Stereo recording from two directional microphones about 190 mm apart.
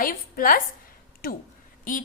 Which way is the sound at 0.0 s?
45° left (ahead or behind).